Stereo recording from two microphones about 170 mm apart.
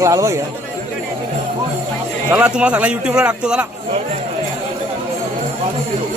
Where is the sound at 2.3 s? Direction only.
5° right (ahead or behind).